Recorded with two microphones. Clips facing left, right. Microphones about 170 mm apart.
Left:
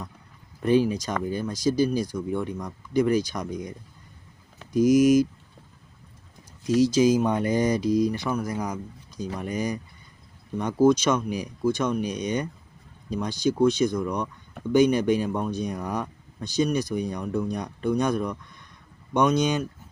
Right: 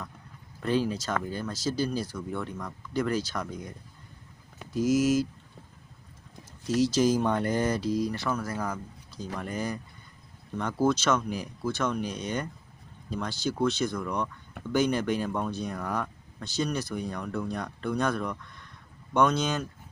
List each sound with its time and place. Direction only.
0.6 s speech: 15° left (ahead or behind)
6.7 s speech: 10° left (ahead or behind)